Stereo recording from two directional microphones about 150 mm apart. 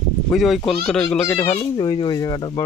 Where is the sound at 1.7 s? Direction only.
25° left (ahead or behind).